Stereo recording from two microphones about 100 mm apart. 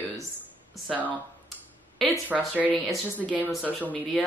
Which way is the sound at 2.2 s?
15° right (ahead or behind).